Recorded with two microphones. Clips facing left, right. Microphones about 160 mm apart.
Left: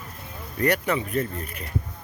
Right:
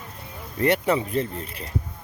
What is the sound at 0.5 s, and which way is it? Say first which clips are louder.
Speech: right 2 dB; 25° right (ahead or behind).